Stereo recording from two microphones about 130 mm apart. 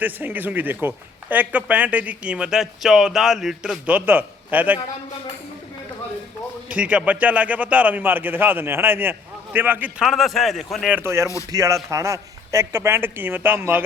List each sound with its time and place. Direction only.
0.0 s speech: 15° right (ahead or behind)
6.7 s speech: 10° right (ahead or behind)
10.0 s a man's voice: centre (ahead or behind)
10.9 s a man's voice: 20° right (ahead or behind)